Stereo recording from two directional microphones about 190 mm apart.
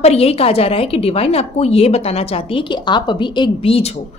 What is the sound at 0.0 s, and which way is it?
A woman's voice, 35° left (ahead or behind).